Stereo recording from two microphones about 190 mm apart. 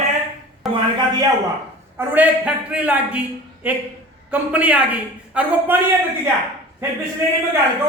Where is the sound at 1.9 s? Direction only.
10° right (ahead or behind).